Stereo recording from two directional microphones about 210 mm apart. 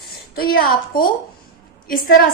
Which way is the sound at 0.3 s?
45° left (ahead or behind).